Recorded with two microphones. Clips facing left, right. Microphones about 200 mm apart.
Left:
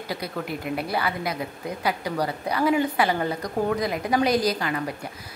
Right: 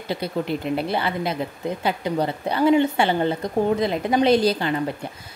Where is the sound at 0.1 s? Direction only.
25° right (ahead or behind).